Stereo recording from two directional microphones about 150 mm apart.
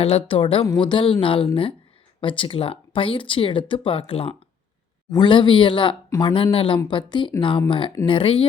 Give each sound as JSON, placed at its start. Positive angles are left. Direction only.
{"t": 0.3, "sound": "speech", "side_deg": 35}